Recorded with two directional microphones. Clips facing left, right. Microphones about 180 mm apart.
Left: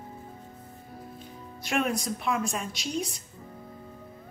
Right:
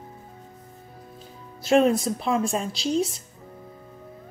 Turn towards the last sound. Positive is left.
turn(degrees=-30)  # may be behind; listen again after turning